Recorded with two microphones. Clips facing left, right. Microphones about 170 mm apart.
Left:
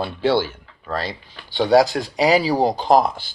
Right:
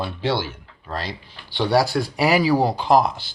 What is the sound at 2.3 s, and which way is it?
Speech, 35° left (ahead or behind).